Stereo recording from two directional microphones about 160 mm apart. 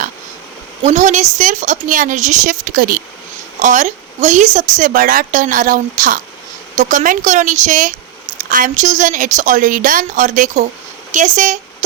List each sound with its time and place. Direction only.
0.8 s speech: 45° right (ahead or behind)
3.6 s a woman's voice: 50° right (ahead or behind)